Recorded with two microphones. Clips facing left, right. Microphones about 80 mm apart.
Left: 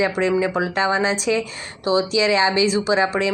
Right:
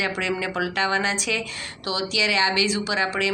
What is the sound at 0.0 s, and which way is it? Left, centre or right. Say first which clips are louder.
A woman's voice: left 7 dB; left.